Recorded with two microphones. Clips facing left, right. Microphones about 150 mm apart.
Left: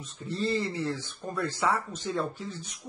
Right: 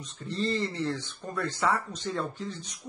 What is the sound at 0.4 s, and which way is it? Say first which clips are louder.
Speech: even; 10° left (ahead or behind).